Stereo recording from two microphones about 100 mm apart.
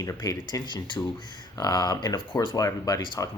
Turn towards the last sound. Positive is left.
turn(degrees=35)  # may be behind; listen again after turning